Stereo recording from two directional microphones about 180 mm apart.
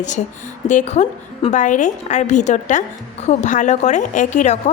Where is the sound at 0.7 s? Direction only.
40° left (ahead or behind).